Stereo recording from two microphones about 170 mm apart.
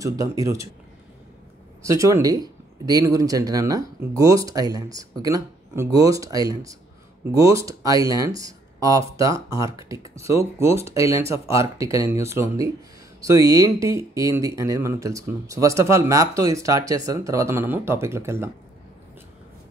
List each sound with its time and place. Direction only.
0.2 s speech: 20° right (ahead or behind)
1.9 s speech: 20° right (ahead or behind)